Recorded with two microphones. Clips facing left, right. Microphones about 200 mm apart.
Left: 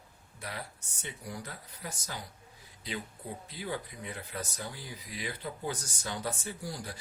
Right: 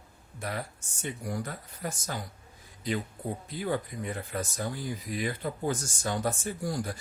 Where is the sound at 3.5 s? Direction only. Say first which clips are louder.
Right 7 dB; 50° right (ahead or behind).